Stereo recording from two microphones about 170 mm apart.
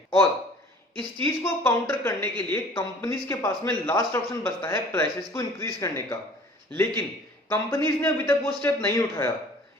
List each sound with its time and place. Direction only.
0.9 s a woman's voice: 10° left (ahead or behind)